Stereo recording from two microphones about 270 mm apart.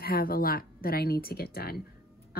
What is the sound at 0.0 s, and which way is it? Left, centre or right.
Speech, left.